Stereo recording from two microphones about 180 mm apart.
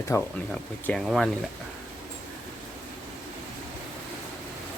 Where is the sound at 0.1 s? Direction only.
15° left (ahead or behind).